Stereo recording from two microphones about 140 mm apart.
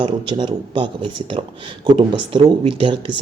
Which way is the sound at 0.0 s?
35° right (ahead or behind).